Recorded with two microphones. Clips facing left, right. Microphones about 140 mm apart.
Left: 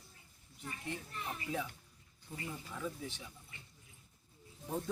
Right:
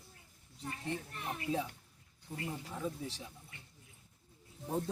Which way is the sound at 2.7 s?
30° right (ahead or behind).